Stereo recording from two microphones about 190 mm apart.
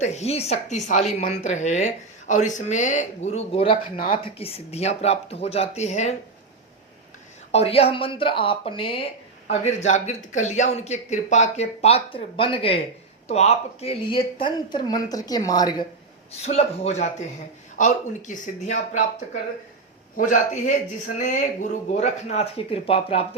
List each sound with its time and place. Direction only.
0.0 s speech: 35° left (ahead or behind)
3.9 s a man's voice: 45° left (ahead or behind)
4.4 s speech: 30° left (ahead or behind)
7.5 s a woman's voice: 30° left (ahead or behind)
9.5 s a woman's voice: 40° left (ahead or behind); by 15.9 s 20° left (ahead or behind)
16.4 s a man's voice: 35° left (ahead or behind)